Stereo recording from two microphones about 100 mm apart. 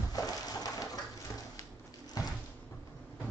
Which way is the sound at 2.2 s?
40° left (ahead or behind).